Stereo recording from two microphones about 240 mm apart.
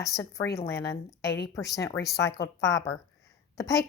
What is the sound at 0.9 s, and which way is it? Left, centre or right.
Speech, left.